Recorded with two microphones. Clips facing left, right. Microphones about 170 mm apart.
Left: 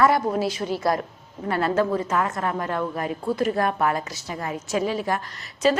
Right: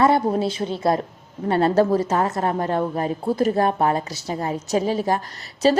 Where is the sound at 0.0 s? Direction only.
25° right (ahead or behind).